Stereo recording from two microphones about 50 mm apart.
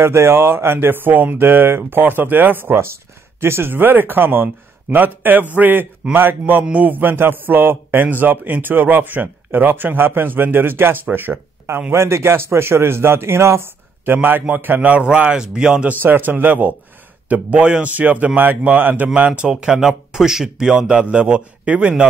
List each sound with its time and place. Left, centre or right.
0.0 s speech: right
2.7 s a man's voice: right
11.9 s a man's voice: right
14.0 s a man's voice: right
15.3 s speech: centre
15.9 s a man's voice: right
19.5 s a man's voice: centre